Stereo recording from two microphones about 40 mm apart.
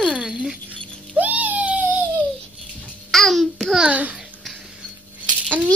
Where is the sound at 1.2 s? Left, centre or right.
Right.